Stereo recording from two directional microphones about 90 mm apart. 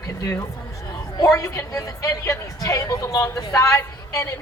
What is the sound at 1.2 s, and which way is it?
A woman's voice, 35° left (ahead or behind).